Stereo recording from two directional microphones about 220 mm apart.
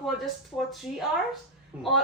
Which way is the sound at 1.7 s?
5° right (ahead or behind).